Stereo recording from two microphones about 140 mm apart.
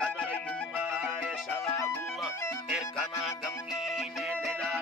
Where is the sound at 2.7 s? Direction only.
5° right (ahead or behind).